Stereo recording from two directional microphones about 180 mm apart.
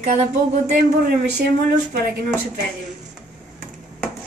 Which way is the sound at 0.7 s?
55° right (ahead or behind).